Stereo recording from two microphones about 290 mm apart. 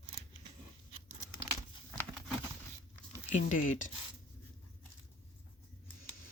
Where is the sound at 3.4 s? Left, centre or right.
Left.